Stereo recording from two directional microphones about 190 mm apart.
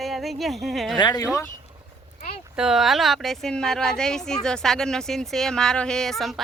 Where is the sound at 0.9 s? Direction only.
20° left (ahead or behind).